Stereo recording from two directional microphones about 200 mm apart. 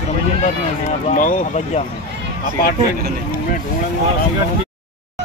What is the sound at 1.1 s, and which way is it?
Speech, 40° left (ahead or behind).